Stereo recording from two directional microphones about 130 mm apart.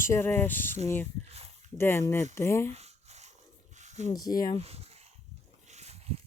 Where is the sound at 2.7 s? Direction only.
55° right (ahead or behind).